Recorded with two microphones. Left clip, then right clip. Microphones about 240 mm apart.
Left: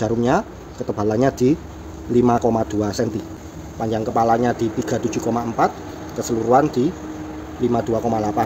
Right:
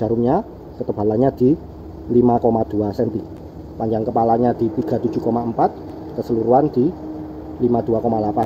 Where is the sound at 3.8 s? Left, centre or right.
Centre.